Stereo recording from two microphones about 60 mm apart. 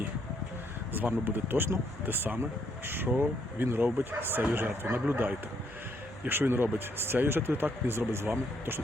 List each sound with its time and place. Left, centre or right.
0.9 s speech: right